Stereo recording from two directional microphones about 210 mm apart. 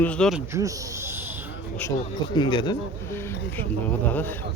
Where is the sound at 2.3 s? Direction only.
20° left (ahead or behind).